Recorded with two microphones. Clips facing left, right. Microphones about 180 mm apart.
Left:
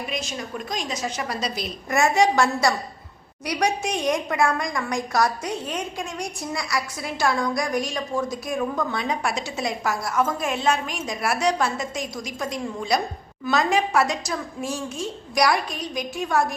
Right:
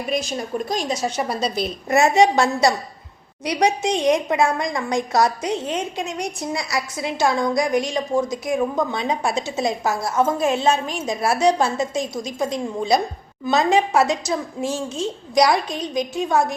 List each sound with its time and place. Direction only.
0.1 s a woman's voice: 35° right (ahead or behind)